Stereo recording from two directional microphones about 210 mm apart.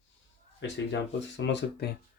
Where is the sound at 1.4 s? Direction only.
60° left (ahead or behind).